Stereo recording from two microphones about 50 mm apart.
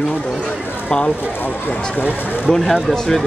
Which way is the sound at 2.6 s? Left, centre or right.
Centre.